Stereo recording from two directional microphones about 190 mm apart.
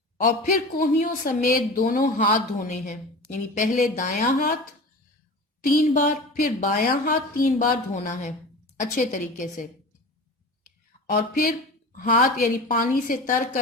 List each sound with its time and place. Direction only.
0.8 s a woman's voice: 45° left (ahead or behind)
5.6 s a woman's voice: 45° left (ahead or behind)
11.0 s a woman's voice: 50° left (ahead or behind)